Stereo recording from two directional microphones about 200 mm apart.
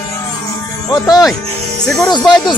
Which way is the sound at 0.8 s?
20° left (ahead or behind).